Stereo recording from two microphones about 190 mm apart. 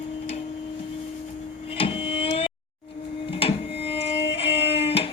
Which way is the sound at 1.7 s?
30° left (ahead or behind).